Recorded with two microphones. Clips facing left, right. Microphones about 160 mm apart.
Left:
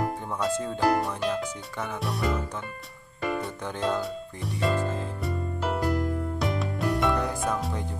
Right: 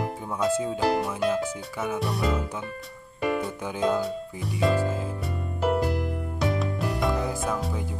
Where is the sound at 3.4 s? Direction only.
5° right (ahead or behind).